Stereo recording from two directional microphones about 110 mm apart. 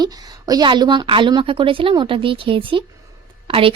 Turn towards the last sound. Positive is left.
turn(degrees=-55)  # may be behind; listen again after turning